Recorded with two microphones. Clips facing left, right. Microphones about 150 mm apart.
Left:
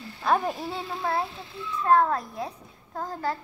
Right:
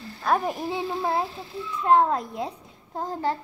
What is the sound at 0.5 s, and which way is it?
A child's voice, 15° right (ahead or behind).